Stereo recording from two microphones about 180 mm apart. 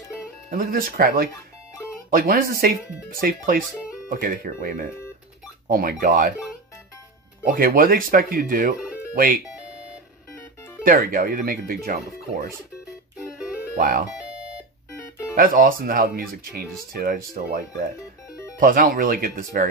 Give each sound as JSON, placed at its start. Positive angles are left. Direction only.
{"t": 0.5, "sound": "speech", "side_deg": -50}
{"t": 7.4, "sound": "speech", "side_deg": -50}
{"t": 10.8, "sound": "speech", "side_deg": -50}
{"t": 13.7, "sound": "speech", "side_deg": -50}
{"t": 15.3, "sound": "speech", "side_deg": -50}
{"t": 18.6, "sound": "speech", "side_deg": -50}